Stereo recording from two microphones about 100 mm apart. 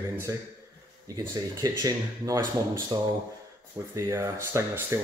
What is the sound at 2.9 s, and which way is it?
Speech, 50° right (ahead or behind).